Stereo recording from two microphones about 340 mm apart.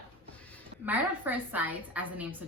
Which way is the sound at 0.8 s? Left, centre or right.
Centre.